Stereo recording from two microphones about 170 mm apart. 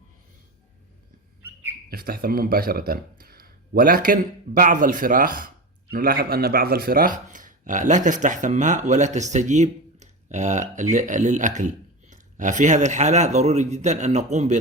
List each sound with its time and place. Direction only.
1.9 s speech: 60° right (ahead or behind); by 14.6 s 40° right (ahead or behind)